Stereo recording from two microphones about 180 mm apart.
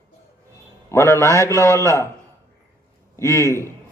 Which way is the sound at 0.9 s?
15° left (ahead or behind).